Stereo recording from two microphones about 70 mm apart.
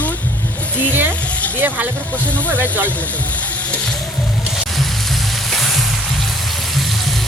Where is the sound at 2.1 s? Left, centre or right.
Left.